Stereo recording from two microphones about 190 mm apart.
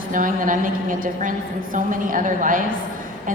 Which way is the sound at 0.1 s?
45° right (ahead or behind).